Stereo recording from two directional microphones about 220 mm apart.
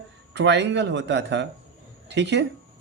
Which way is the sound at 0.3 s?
50° right (ahead or behind).